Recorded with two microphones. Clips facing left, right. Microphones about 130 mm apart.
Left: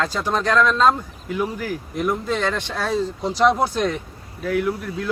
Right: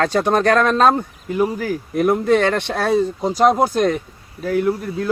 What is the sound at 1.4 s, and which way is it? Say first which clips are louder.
Speech: right 6 dB; 45° right (ahead or behind).